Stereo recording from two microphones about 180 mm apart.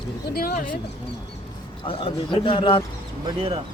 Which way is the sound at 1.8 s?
30° left (ahead or behind).